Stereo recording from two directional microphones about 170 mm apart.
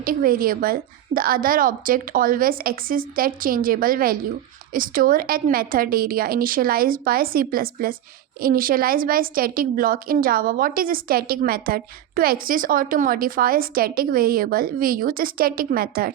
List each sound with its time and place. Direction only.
0.0 s a woman's voice: 55° right (ahead or behind)